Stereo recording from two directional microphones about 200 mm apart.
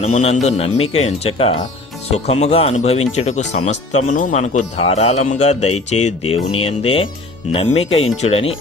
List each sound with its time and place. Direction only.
0.0 s speech: 35° left (ahead or behind)